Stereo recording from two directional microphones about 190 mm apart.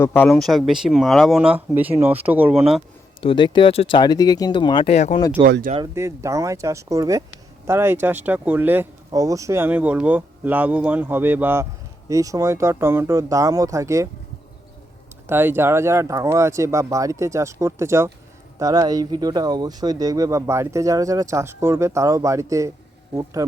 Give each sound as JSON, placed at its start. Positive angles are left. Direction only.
{"t": 0.0, "sound": "speech", "side_deg": 10}
{"t": 3.2, "sound": "speech", "side_deg": 25}
{"t": 5.5, "sound": "speech", "side_deg": -60}
{"t": 5.8, "sound": "speech", "side_deg": -15}
{"t": 15.3, "sound": "speech", "side_deg": -10}